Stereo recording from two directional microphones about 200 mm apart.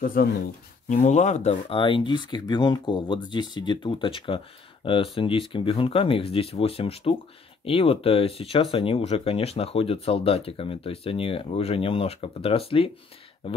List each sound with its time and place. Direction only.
0.0 s speech: 45° left (ahead or behind)
0.8 s speech: 35° left (ahead or behind)